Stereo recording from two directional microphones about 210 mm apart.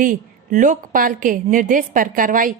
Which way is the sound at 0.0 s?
40° right (ahead or behind).